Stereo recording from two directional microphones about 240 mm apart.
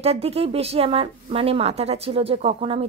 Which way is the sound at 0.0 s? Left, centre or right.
Right.